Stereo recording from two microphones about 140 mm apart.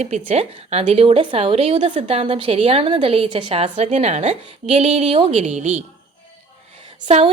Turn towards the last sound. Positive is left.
turn(degrees=-50)  # may be behind; listen again after turning